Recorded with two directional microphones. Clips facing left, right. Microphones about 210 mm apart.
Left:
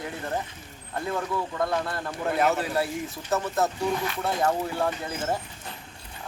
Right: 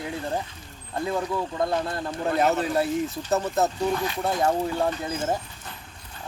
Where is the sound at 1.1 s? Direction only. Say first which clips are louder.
Right 2 dB; 15° right (ahead or behind).